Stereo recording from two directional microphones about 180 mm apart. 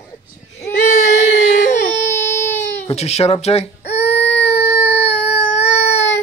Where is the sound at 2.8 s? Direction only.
35° left (ahead or behind).